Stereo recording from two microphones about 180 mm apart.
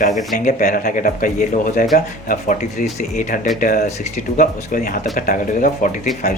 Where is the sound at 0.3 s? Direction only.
45° left (ahead or behind).